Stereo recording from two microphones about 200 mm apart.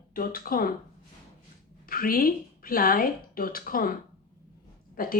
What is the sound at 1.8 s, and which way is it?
Speech, 45° left (ahead or behind).